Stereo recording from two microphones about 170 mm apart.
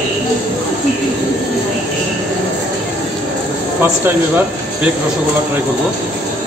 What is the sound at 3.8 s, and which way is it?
Speech, 10° right (ahead or behind).